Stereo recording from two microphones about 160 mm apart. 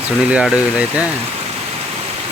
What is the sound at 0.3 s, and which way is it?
Speech, 5° right (ahead or behind).